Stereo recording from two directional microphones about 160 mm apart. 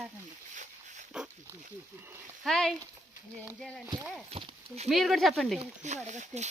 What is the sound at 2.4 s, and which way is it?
Speech, 5° left (ahead or behind).